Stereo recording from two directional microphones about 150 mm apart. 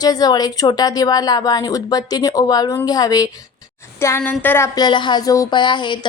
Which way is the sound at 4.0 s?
15° left (ahead or behind).